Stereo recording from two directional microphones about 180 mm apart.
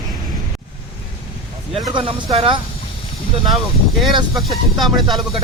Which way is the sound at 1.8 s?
25° right (ahead or behind).